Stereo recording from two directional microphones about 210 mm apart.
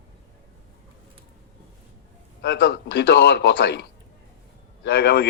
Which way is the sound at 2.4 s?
55° left (ahead or behind).